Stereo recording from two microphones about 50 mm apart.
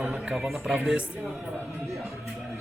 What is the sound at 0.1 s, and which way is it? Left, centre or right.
Music, centre.